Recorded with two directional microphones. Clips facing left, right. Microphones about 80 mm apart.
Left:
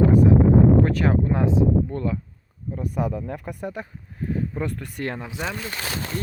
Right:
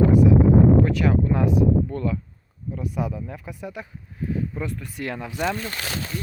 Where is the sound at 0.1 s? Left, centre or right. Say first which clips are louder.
Even; left.